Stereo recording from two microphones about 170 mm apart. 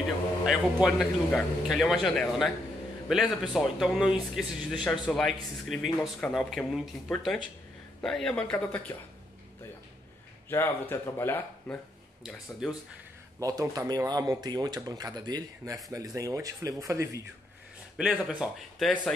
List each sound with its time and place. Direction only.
0.5 s speech: centre (ahead or behind)
10.5 s speech: 15° left (ahead or behind)
12.2 s speech: centre (ahead or behind)
13.4 s speech: 20° right (ahead or behind)
17.9 s speech: 5° right (ahead or behind)